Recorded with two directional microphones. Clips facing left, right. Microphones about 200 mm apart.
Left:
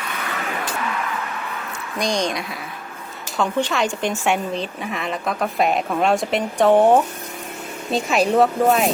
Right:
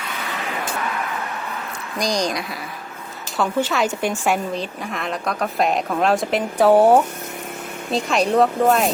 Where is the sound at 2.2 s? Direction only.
Centre (ahead or behind).